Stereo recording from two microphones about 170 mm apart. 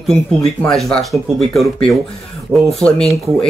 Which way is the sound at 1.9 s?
20° left (ahead or behind).